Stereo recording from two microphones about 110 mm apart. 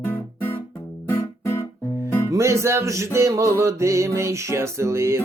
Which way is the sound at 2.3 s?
25° right (ahead or behind).